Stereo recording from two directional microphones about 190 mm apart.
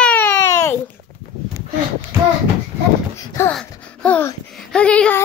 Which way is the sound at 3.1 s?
15° left (ahead or behind).